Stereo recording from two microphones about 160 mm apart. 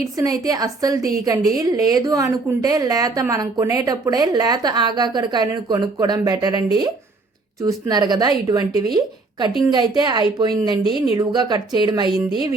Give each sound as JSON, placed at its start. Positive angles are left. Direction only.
{"t": 0.2, "sound": "a woman's voice", "side_deg": -20}